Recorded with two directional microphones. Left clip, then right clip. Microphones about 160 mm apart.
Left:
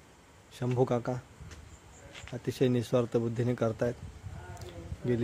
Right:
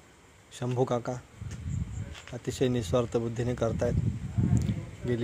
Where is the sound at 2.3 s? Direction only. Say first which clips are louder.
Even; 20° left (ahead or behind).